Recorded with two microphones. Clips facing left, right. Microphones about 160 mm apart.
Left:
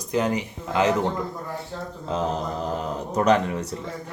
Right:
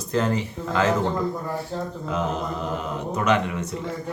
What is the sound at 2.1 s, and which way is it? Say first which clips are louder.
Speech: left 1 dB; 35° left (ahead or behind).